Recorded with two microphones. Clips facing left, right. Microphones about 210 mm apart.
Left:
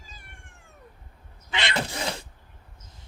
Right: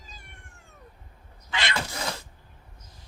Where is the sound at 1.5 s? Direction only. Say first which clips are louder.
Left 2 dB; 20° left (ahead or behind).